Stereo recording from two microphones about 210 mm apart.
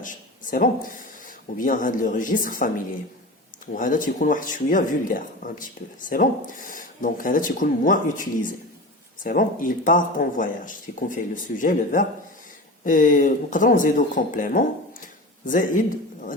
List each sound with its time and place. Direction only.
0.0 s speech: 40° left (ahead or behind)
3.8 s speech: 40° left (ahead or behind)